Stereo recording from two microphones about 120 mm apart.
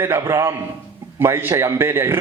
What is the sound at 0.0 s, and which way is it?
A man's voice, 20° right (ahead or behind).